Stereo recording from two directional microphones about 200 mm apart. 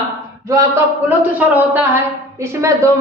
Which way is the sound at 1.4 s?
5° right (ahead or behind).